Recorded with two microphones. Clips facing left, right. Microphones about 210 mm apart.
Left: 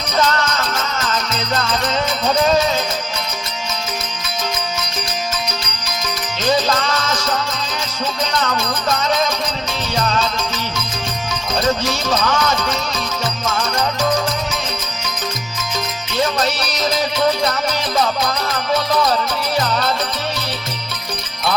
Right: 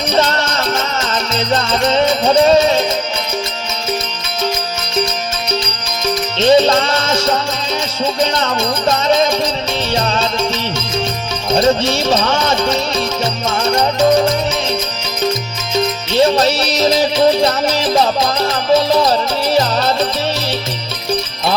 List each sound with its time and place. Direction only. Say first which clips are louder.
0.2 s music: even; 30° right (ahead or behind)
6.4 s music: right 7 dB; 25° right (ahead or behind)
11.5 s music: right 6 dB; 25° right (ahead or behind)
15.7 s music: right 9 dB; 30° right (ahead or behind)